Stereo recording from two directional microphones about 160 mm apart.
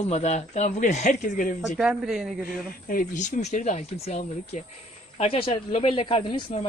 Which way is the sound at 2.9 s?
55° left (ahead or behind).